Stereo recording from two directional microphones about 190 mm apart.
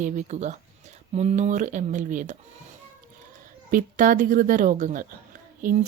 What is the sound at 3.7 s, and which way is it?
Speech, 45° right (ahead or behind).